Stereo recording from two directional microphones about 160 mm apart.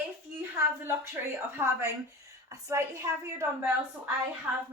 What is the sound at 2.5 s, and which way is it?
Speech, 20° right (ahead or behind).